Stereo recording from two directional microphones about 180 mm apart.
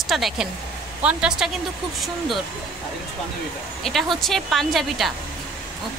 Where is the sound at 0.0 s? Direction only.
Centre (ahead or behind).